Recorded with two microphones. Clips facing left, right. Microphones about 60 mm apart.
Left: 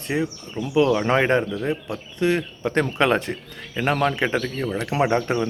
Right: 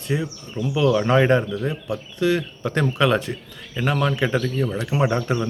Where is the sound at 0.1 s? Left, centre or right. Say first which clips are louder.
Left 1 dB; left.